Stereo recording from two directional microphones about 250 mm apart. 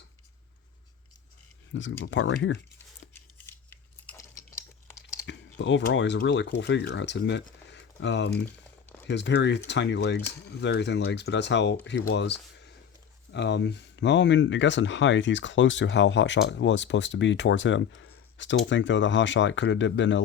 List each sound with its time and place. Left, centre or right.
1.7 s speech: left
3.3 s chewing: centre
5.2 s speech: left